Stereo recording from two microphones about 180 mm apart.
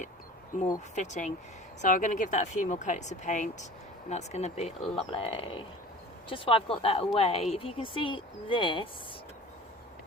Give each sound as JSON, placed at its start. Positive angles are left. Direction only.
{"t": 0.9, "sound": "a woman's voice", "side_deg": 40}